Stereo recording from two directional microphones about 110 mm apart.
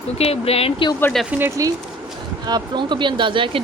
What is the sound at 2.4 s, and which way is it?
Speech, 40° right (ahead or behind).